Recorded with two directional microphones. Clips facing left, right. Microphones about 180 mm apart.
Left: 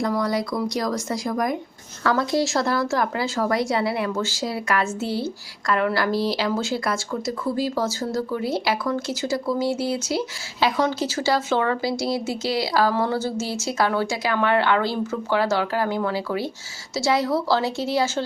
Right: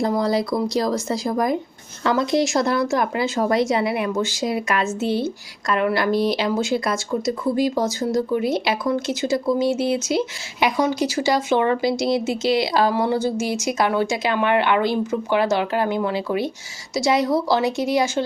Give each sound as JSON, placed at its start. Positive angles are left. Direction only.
{"t": 0.0, "sound": "a woman's voice", "side_deg": -30}